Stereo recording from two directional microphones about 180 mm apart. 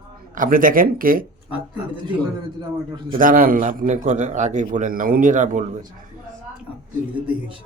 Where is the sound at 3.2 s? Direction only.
50° right (ahead or behind).